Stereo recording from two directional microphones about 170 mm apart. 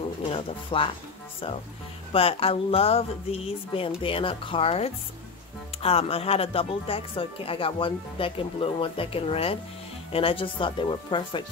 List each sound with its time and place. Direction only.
0.3 s speech: 30° left (ahead or behind)
2.1 s speech: 35° left (ahead or behind)